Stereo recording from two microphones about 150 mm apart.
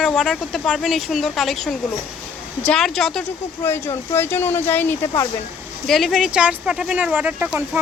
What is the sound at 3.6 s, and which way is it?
Speech, 15° left (ahead or behind).